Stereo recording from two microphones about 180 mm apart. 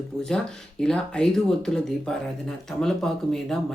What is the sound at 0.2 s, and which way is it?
Speech, 5° left (ahead or behind).